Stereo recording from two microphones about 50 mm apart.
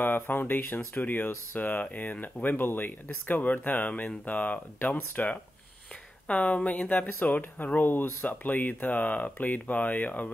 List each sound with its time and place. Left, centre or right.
0.0 s speech: left